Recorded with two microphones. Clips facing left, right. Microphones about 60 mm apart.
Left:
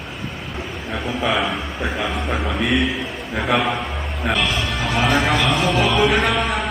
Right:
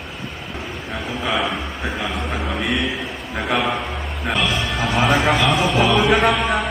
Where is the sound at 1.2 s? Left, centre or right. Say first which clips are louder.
Left 1 dB; centre.